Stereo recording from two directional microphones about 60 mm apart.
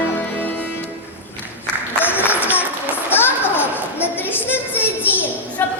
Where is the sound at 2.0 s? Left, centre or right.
Left.